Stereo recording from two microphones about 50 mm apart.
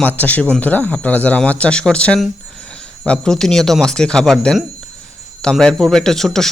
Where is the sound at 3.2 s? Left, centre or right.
Centre.